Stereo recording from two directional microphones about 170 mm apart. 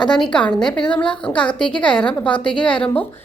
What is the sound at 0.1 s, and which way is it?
A woman's voice, 5° left (ahead or behind).